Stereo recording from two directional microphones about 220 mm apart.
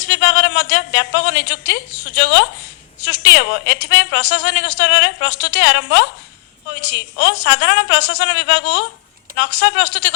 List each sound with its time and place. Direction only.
0.0 s a woman's voice: 50° left (ahead or behind)